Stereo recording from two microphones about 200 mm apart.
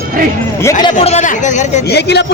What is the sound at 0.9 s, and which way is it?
Speech, 35° left (ahead or behind).